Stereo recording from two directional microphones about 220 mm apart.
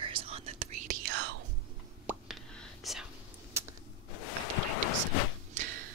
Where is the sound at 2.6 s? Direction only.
Centre (ahead or behind).